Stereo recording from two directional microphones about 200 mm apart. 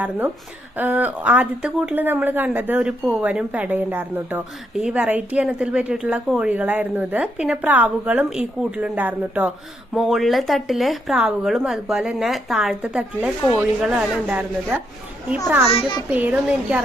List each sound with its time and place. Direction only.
0.8 s a woman's voice: 10° right (ahead or behind)
15.7 s a child's voice: 25° left (ahead or behind)
16.1 s speech: 10° right (ahead or behind)